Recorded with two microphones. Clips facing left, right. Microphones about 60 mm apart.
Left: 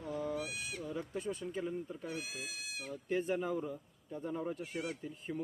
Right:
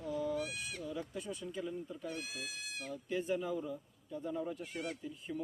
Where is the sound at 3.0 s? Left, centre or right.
Left.